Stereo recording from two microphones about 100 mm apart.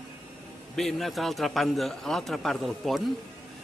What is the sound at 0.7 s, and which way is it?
Speech, centre (ahead or behind).